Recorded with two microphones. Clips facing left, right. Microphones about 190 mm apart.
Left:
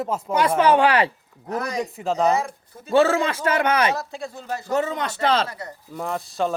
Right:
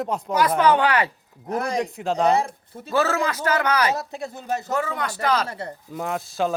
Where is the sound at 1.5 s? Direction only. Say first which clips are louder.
Right 2 dB; 25° right (ahead or behind).